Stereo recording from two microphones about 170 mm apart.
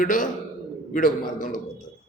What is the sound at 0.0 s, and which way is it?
Speech, 50° left (ahead or behind).